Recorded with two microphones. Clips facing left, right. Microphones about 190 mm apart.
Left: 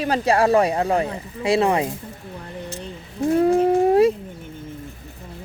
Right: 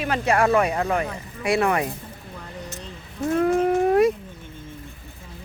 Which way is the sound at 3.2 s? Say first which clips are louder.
Left 3 dB; 25° left (ahead or behind).